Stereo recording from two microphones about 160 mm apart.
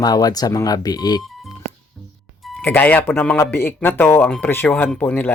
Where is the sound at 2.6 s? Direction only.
10° left (ahead or behind).